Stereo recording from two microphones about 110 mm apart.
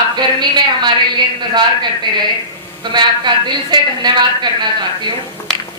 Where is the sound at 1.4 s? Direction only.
45° right (ahead or behind).